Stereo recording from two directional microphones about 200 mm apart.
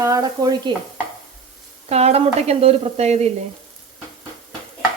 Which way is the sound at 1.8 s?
30° right (ahead or behind).